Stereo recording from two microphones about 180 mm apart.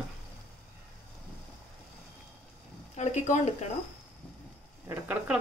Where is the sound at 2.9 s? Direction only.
40° left (ahead or behind).